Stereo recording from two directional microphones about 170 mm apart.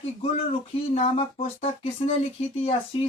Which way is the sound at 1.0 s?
35° left (ahead or behind).